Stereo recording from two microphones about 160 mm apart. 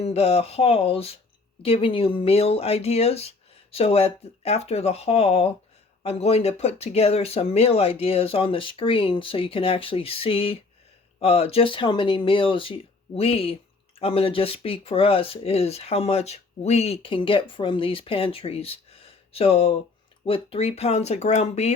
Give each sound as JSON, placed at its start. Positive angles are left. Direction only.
{"t": 0.0, "sound": "speech", "side_deg": 40}